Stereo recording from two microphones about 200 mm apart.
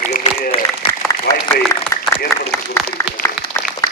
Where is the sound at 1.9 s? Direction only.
15° left (ahead or behind).